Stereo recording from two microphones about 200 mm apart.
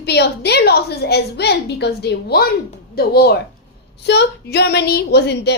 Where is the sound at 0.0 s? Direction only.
55° left (ahead or behind).